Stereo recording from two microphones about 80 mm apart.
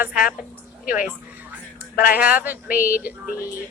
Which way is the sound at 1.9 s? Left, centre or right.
Centre.